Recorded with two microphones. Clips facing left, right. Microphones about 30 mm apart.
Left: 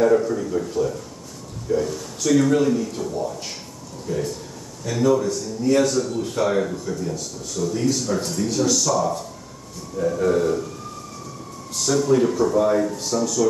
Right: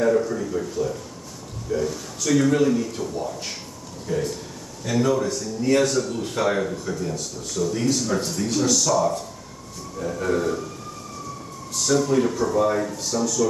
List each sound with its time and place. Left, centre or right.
0.0 s speech: centre
1.7 s speech: centre
2.2 s speech: centre
4.8 s speech: centre
11.8 s speech: centre
13.2 s speech: centre